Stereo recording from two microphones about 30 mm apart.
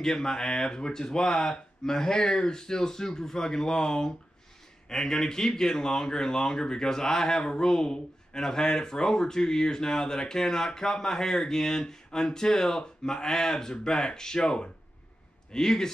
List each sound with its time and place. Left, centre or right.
0.0 s speech: centre